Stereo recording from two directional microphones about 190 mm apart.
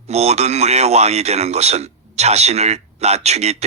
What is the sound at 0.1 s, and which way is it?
Speech, 35° right (ahead or behind).